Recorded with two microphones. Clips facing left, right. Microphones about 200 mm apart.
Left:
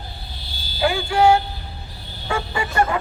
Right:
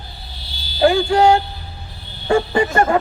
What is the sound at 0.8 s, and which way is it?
Speech, 45° right (ahead or behind).